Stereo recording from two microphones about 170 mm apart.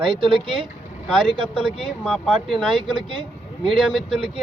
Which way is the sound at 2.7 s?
30° right (ahead or behind).